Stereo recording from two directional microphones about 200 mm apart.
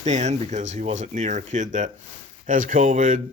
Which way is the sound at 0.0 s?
35° right (ahead or behind).